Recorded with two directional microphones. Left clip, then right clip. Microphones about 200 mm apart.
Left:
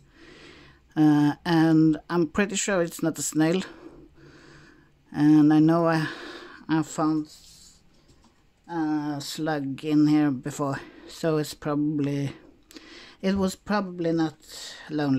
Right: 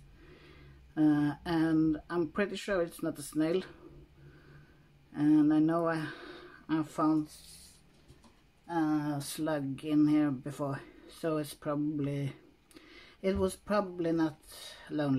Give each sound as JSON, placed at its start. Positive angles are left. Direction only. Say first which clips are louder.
{"t": 0.2, "sound": "speech", "louder": "left 9 dB", "side_deg": 50}
{"t": 5.1, "sound": "speech", "louder": "left 8 dB", "side_deg": 55}
{"t": 8.6, "sound": "speech", "louder": "left 4 dB", "side_deg": 30}